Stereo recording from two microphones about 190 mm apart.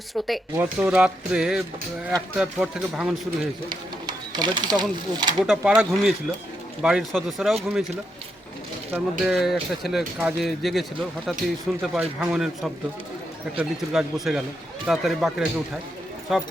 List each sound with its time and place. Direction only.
0.5 s speech: 10° right (ahead or behind)
3.4 s speech: 20° right (ahead or behind)
5.5 s speech: 5° right (ahead or behind)
8.9 s speech: centre (ahead or behind)